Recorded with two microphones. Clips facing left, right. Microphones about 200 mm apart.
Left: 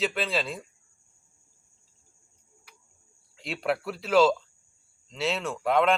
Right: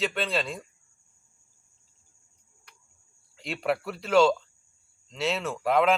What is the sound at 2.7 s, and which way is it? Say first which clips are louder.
Cricket: left 1 dB; 5° left (ahead or behind).